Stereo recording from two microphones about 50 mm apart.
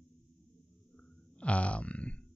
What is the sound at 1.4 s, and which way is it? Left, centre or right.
Speech, left.